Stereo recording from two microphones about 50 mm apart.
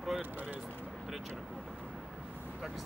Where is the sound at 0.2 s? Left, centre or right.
Right.